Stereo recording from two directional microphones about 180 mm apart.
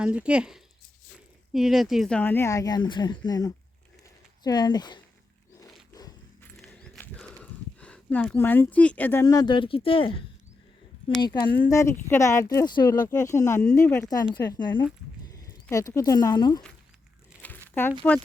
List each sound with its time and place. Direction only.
0.0 s speech: 5° right (ahead or behind); by 4.9 s 25° left (ahead or behind)
5.9 s zipper: 20° left (ahead or behind)
6.6 s a sound: 5° left (ahead or behind)
9.2 s speech: 20° left (ahead or behind)
11.4 s speech: 15° left (ahead or behind)
18.0 s speech: 10° left (ahead or behind)